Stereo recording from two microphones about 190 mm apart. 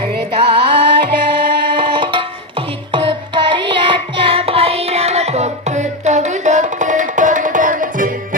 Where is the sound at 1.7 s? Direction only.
25° right (ahead or behind).